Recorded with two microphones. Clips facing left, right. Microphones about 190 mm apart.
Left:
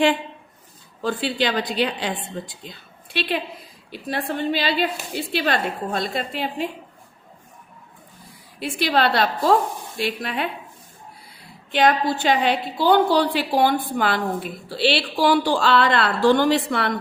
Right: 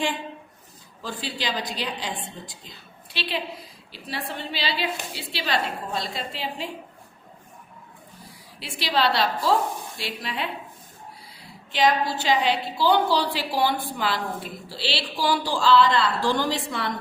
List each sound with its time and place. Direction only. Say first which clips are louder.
1.0 s a woman's voice: left 8 dB; 60° left (ahead or behind)
8.5 s a woman's voice: left 5 dB; 50° left (ahead or behind)
11.7 s a woman's voice: left 3 dB; 60° left (ahead or behind)